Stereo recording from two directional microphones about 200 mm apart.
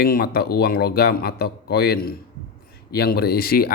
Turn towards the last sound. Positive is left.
turn(degrees=50)  # may be behind; listen again after turning